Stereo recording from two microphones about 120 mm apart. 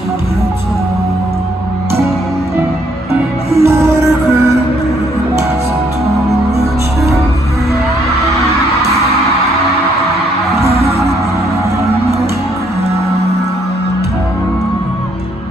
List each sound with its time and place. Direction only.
3.6 s music: 25° right (ahead or behind)
8.4 s music: 60° right (ahead or behind)
10.6 s music: 60° right (ahead or behind)